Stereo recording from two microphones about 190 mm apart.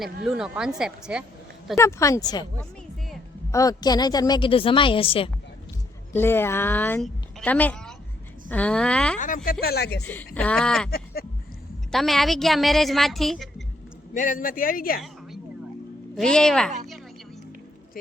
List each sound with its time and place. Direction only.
0.3 s a woman's voice: 5° right (ahead or behind)
1.7 s speech: 15° left (ahead or behind)
3.5 s a woman's voice: 20° left (ahead or behind)
6.1 s a woman's voice: 10° left (ahead or behind)
9.1 s speech: 45° left (ahead or behind)
10.0 s a woman's voice: 10° left (ahead or behind)
10.9 s speech: 55° left (ahead or behind)
11.9 s a woman's voice: centre (ahead or behind)
14.1 s speech: 45° left (ahead or behind)
16.1 s a woman's voice: 5° left (ahead or behind)